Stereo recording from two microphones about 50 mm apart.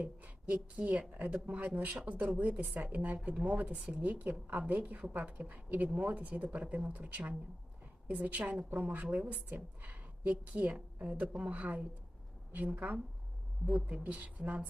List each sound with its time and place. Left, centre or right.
0.0 s a woman's voice: right